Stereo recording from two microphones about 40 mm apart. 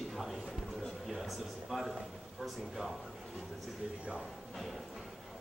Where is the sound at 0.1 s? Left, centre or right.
Centre.